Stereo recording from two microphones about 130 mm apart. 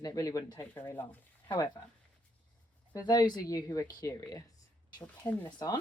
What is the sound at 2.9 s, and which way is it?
Speech, 30° left (ahead or behind).